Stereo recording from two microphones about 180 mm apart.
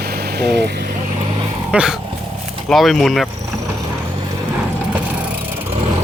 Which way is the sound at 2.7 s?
Centre (ahead or behind).